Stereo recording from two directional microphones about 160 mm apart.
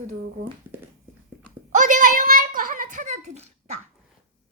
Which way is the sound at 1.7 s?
55° right (ahead or behind).